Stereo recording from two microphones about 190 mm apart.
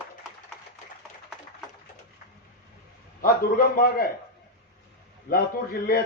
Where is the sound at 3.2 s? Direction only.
50° left (ahead or behind).